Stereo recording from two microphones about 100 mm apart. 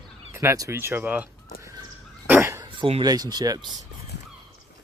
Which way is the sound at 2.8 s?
75° right (ahead or behind).